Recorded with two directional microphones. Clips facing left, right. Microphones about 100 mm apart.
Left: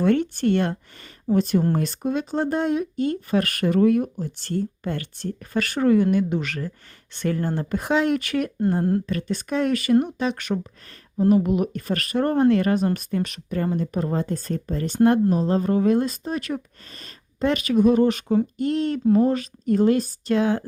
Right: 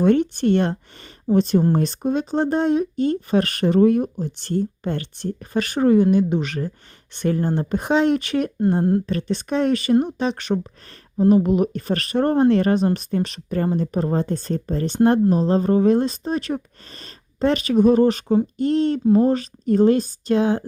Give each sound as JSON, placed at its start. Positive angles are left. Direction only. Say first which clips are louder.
{"t": 0.0, "sound": "speech", "louder": "right 3 dB", "side_deg": -20}